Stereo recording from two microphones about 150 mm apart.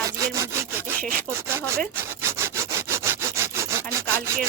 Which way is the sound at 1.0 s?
75° right (ahead or behind).